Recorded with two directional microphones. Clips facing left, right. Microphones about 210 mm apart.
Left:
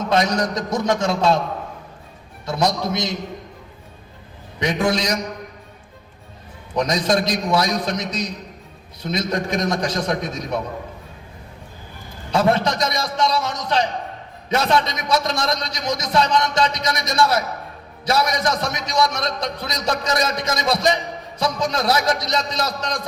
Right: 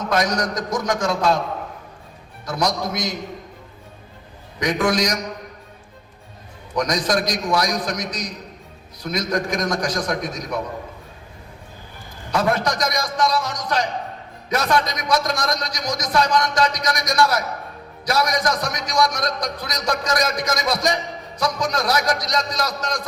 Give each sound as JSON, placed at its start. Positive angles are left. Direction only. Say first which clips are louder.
{"t": 0.1, "sound": "a man's voice", "louder": "left 2 dB", "side_deg": 25}
{"t": 2.5, "sound": "a man's voice", "louder": "left 2 dB", "side_deg": 25}
{"t": 4.6, "sound": "a man's voice", "louder": "even", "side_deg": 25}
{"t": 6.7, "sound": "a man's voice", "louder": "left 2 dB", "side_deg": 25}
{"t": 12.3, "sound": "a man's voice", "louder": "left 2 dB", "side_deg": 25}